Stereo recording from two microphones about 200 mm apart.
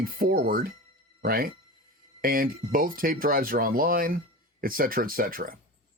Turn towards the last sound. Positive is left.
turn(degrees=-45)  # may be behind; listen again after turning